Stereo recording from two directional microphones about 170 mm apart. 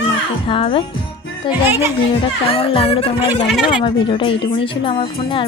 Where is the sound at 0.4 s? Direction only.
30° left (ahead or behind).